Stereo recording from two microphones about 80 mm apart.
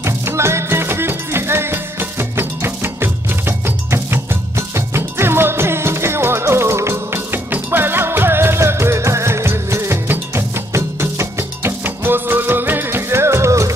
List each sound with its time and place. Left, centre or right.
0.0 s music: right